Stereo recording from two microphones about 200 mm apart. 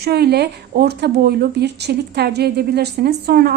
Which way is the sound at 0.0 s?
55° right (ahead or behind).